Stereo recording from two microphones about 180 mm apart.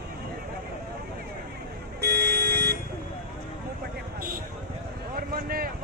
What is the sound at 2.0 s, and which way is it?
Vehicle, 65° right (ahead or behind).